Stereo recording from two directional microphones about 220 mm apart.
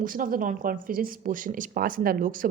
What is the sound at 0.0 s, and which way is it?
A woman's voice, 40° right (ahead or behind).